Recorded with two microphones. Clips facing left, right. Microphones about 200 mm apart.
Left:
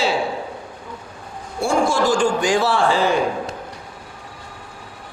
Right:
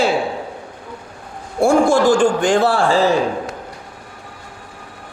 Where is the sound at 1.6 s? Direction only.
55° right (ahead or behind).